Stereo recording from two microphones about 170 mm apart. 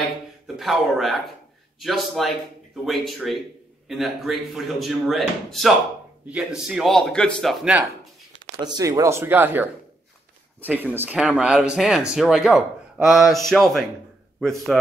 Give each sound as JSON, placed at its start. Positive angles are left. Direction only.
{"t": 0.6, "sound": "speech", "side_deg": 0}
{"t": 7.6, "sound": "speech", "side_deg": -5}
{"t": 8.5, "sound": "speech", "side_deg": -25}